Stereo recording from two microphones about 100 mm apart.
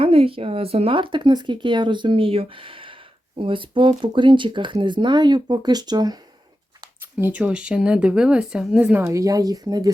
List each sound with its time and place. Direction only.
0.0 s speech: 70° right (ahead or behind); by 6.2 s 45° right (ahead or behind)
7.0 s speech: 20° right (ahead or behind)
8.8 s speech: 20° right (ahead or behind); by 9.9 s 40° right (ahead or behind)